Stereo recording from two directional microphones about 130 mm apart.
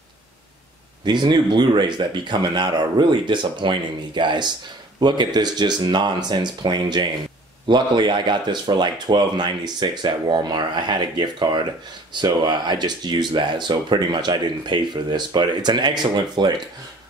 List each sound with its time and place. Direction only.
1.0 s speech: 35° right (ahead or behind)